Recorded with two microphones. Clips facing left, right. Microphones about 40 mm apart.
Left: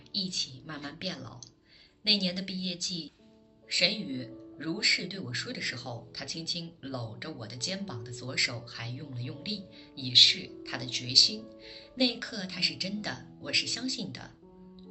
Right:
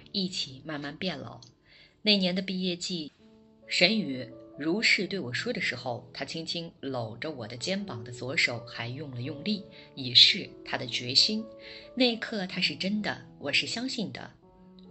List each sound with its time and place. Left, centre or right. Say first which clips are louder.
0.1 s speech: right 3 dB; right